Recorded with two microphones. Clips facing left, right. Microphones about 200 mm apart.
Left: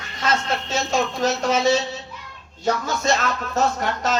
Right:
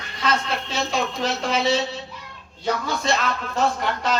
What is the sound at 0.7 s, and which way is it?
Speech, 45° left (ahead or behind).